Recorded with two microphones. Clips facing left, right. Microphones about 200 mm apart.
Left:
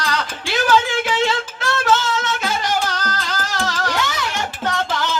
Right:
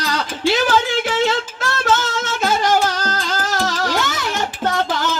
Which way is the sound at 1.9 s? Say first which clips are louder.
Even; 50° right (ahead or behind).